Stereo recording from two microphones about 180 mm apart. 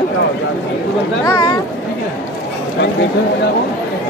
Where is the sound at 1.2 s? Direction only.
20° left (ahead or behind).